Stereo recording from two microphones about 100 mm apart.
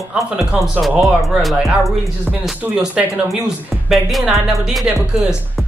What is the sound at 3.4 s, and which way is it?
Speech, centre (ahead or behind).